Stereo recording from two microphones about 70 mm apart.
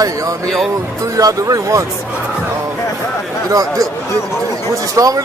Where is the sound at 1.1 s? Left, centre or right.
Right.